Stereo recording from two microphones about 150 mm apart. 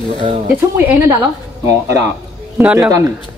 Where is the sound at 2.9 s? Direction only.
20° right (ahead or behind).